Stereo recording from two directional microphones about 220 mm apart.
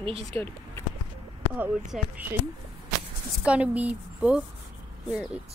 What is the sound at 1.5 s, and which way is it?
Speech, 5° right (ahead or behind).